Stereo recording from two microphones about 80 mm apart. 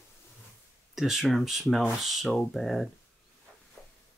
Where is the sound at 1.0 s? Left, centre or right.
Centre.